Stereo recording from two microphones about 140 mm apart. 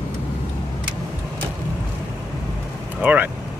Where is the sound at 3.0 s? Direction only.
10° right (ahead or behind).